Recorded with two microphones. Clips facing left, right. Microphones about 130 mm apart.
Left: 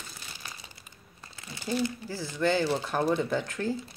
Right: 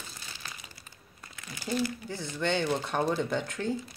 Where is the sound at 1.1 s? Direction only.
30° left (ahead or behind).